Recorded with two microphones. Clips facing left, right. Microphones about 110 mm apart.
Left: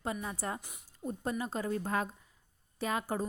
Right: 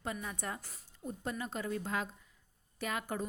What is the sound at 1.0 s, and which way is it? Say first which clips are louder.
A woman's voice: left 4 dB; 40° left (ahead or behind).